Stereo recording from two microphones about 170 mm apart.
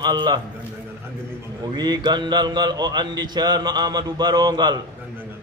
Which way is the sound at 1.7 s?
25° right (ahead or behind).